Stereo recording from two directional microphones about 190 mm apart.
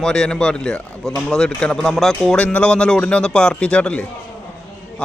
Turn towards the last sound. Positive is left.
turn(degrees=5)  # may be behind; listen again after turning